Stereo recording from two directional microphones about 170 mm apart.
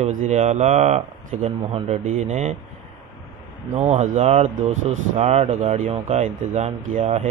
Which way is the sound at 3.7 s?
40° right (ahead or behind).